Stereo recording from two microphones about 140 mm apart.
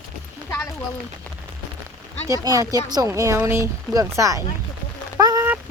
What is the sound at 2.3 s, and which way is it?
Speech, 25° right (ahead or behind).